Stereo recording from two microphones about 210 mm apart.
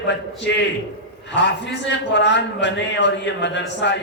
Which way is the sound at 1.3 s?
55° left (ahead or behind).